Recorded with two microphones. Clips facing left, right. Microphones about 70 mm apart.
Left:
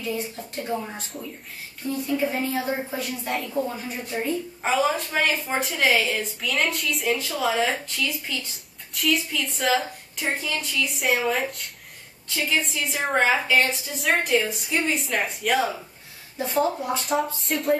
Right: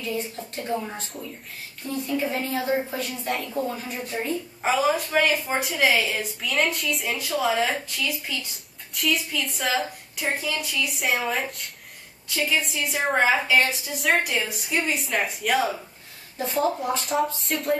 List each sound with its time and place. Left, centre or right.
0.0 s a woman's voice: centre